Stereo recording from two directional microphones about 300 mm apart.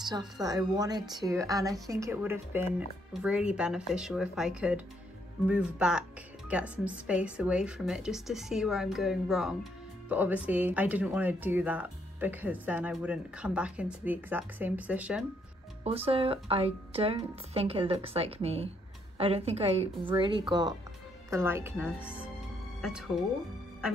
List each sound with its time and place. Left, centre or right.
0.0 s a woman's voice: centre
15.8 s a woman's voice: centre